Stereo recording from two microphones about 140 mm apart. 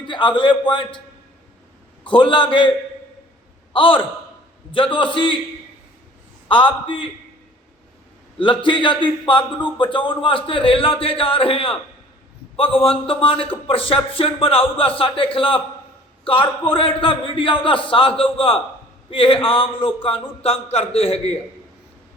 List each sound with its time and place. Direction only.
0.0 s a sound: 35° left (ahead or behind)
0.7 s a man's voice: 35° left (ahead or behind)
2.0 s a man's voice: 35° left (ahead or behind)
6.5 s a man's voice: 35° left (ahead or behind)
8.4 s a man's voice: 35° left (ahead or behind)